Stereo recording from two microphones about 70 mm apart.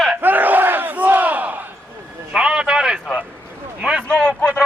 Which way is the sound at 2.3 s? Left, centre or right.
Centre.